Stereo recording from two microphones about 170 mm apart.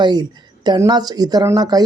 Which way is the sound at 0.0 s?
25° right (ahead or behind).